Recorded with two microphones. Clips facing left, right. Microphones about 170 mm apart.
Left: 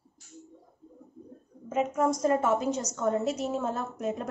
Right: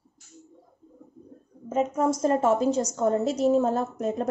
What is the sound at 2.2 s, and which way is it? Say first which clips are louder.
A woman's voice: right 3 dB; 30° right (ahead or behind).